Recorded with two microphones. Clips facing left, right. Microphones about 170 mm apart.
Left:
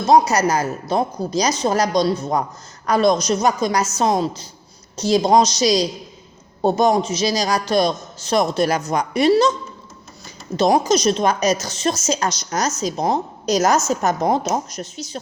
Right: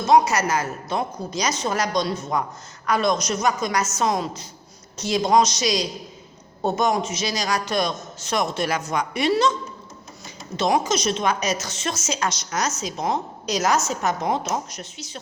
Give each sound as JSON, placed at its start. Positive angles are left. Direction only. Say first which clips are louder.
{"t": 0.0, "sound": "a woman's voice", "louder": "left 3 dB", "side_deg": 35}
{"t": 10.6, "sound": "a woman's voice", "louder": "left 5 dB", "side_deg": 40}